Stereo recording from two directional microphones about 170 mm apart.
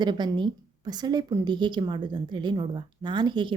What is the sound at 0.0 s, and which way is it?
A woman's voice, 25° right (ahead or behind).